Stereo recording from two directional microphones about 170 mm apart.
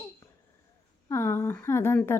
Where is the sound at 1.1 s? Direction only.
15° left (ahead or behind).